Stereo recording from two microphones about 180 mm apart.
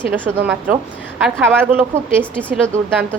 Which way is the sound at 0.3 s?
5° right (ahead or behind).